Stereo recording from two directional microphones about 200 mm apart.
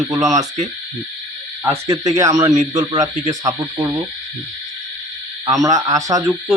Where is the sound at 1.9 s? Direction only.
15° right (ahead or behind).